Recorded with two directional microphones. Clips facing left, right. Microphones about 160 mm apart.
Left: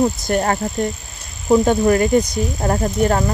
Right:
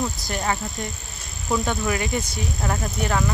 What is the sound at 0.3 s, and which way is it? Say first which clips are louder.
Speech: left 8 dB; 50° left (ahead or behind).